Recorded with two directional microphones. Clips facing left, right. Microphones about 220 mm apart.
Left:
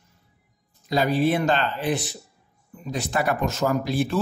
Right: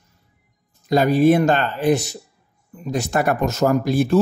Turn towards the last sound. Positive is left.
turn(degrees=-45)  # may be behind; listen again after turning